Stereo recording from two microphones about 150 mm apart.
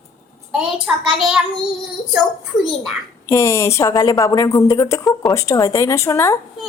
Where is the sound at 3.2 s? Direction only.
20° left (ahead or behind).